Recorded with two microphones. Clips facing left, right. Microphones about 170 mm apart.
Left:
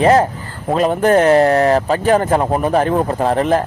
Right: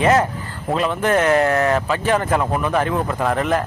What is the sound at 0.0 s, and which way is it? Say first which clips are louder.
Speech: left 4 dB; 35° left (ahead or behind).